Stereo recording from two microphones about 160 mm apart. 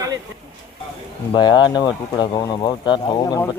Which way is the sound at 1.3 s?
25° left (ahead or behind).